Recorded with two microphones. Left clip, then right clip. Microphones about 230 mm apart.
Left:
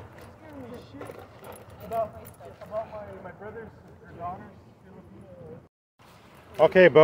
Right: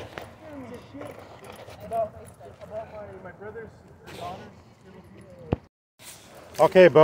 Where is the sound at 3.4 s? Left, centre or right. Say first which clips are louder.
Right 2 dB; centre.